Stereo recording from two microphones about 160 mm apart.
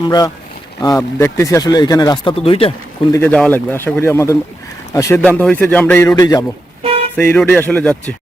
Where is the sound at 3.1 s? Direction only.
10° left (ahead or behind).